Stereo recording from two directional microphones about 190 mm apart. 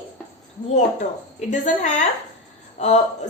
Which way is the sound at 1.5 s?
40° left (ahead or behind).